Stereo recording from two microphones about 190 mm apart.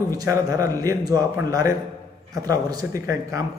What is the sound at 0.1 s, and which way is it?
A man's voice, 20° right (ahead or behind).